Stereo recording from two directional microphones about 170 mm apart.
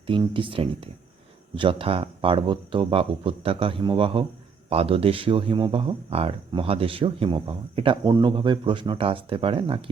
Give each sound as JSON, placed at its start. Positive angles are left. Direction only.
{"t": 0.1, "sound": "speech", "side_deg": -30}